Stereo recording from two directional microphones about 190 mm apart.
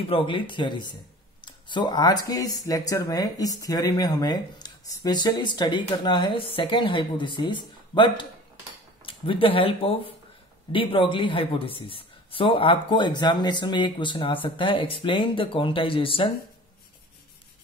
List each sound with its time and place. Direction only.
0.1 s speech: 25° left (ahead or behind)